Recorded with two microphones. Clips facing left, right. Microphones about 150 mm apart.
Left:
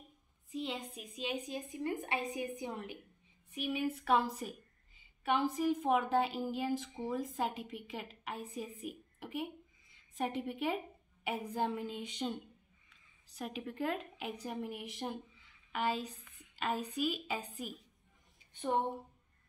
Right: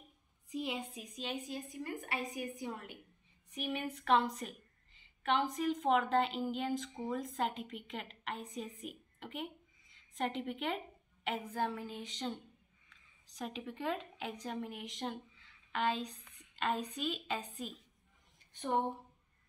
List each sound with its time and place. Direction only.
0.5 s a sound: 10° right (ahead or behind)
1.2 s a woman's voice: 15° left (ahead or behind)
3.6 s a woman's voice: 5° left (ahead or behind)